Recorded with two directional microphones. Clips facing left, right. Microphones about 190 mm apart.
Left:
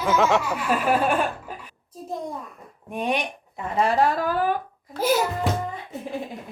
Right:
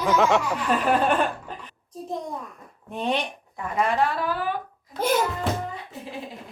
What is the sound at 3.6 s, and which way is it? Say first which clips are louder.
Speech: left 2 dB; 30° left (ahead or behind).